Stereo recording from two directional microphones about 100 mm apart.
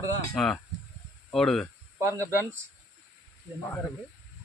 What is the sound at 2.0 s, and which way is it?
Speech, 25° right (ahead or behind).